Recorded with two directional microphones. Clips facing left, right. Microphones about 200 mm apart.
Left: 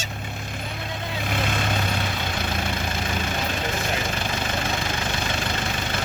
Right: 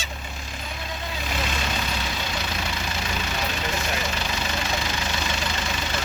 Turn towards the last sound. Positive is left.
turn(degrees=55)  # may be behind; listen again after turning